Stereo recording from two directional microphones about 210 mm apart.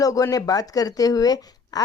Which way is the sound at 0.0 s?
15° left (ahead or behind).